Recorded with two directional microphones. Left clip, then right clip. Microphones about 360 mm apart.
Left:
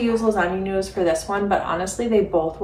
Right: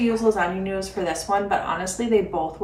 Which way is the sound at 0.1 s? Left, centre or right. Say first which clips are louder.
Left 2 dB; centre.